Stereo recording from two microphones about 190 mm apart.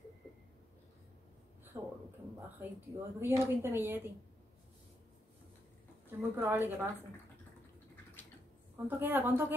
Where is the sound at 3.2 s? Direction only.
15° right (ahead or behind).